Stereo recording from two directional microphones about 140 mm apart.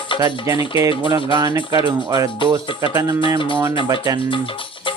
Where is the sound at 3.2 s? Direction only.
40° left (ahead or behind).